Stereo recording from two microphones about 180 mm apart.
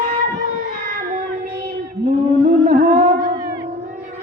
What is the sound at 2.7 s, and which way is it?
Music, 40° right (ahead or behind).